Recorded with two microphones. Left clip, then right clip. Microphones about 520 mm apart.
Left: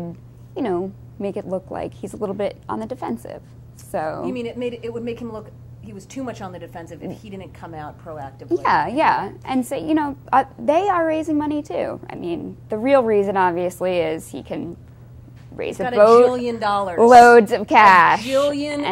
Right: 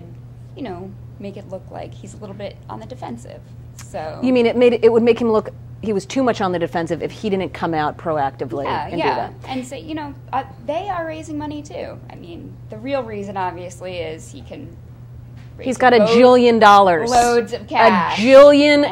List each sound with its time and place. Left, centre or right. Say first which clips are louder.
0.6 s a woman's voice: left 7 dB; left
4.2 s speech: right 12 dB; right
8.6 s a woman's voice: left 4 dB; left
15.8 s a woman's voice: right 1 dB; right
17.1 s a woman's voice: left 7 dB; left
18.2 s speech: right 12 dB; right